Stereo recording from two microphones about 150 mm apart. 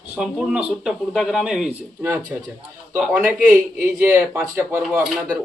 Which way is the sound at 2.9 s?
5° right (ahead or behind).